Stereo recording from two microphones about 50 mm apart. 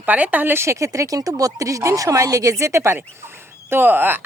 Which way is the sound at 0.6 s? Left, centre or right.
Right.